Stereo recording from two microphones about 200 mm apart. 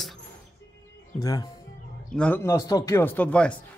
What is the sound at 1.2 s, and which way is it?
Speech, 20° left (ahead or behind).